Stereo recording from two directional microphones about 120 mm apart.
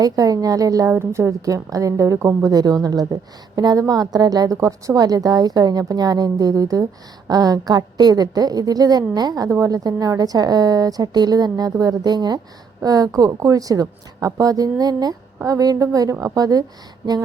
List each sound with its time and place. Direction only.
0.0 s a woman's voice: 30° right (ahead or behind)